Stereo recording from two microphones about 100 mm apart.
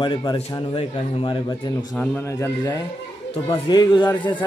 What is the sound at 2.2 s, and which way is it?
Speech, 30° left (ahead or behind).